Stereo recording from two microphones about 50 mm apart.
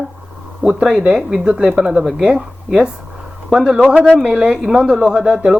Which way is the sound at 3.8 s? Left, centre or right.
Right.